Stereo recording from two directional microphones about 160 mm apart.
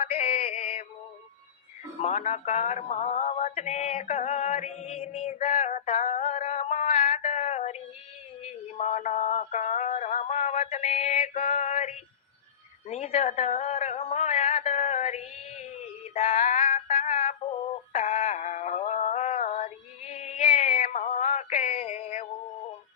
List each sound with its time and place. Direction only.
0.0 s synthetic singing: 40° left (ahead or behind)
2.0 s music: 45° left (ahead or behind)
6.0 s a sound: 45° left (ahead or behind)
17.9 s synthetic singing: 40° left (ahead or behind)